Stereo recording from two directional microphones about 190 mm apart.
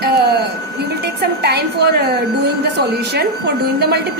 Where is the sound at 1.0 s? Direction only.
60° right (ahead or behind).